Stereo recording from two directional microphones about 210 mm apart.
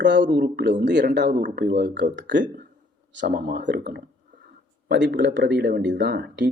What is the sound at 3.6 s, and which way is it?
Speech, 50° right (ahead or behind).